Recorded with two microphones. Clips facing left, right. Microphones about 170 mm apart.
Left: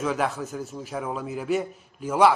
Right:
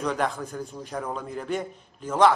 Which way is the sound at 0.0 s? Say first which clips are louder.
Left 1 dB; 5° left (ahead or behind).